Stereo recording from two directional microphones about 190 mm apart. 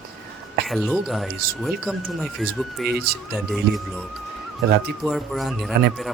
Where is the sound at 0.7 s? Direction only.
Centre (ahead or behind).